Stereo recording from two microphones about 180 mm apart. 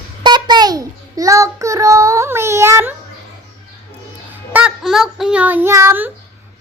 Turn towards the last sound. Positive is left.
turn(degrees=-15)  # may be behind; listen again after turning